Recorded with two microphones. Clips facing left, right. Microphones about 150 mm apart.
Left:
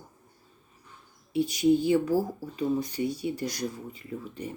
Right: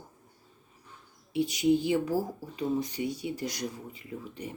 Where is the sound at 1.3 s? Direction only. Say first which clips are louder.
Left 2 dB; 20° right (ahead or behind).